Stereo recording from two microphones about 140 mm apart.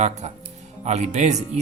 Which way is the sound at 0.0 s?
50° right (ahead or behind).